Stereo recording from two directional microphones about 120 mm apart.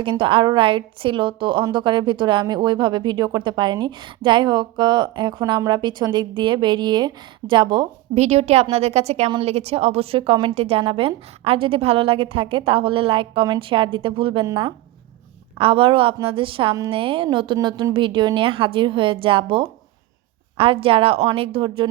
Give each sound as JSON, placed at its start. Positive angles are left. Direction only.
{"t": 0.0, "sound": "a woman's voice", "side_deg": -45}
{"t": 8.1, "sound": "a woman's voice", "side_deg": -65}
{"t": 15.5, "sound": "a woman's voice", "side_deg": -50}